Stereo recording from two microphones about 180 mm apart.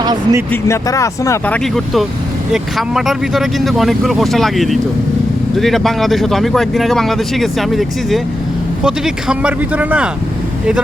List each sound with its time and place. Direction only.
0.0 s speech: 20° right (ahead or behind)
0.5 s speech: 15° left (ahead or behind)
1.5 s speech: centre (ahead or behind)